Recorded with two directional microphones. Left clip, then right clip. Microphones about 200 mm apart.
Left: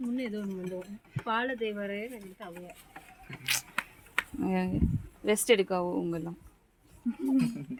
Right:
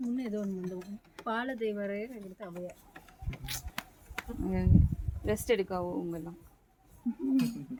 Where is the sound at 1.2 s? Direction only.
75° right (ahead or behind).